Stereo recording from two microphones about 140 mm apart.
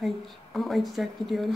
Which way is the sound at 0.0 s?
Centre (ahead or behind).